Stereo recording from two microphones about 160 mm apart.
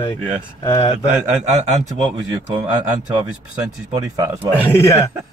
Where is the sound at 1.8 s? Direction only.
25° right (ahead or behind).